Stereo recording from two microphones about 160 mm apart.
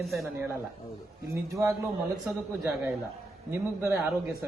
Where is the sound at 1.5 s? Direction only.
20° right (ahead or behind).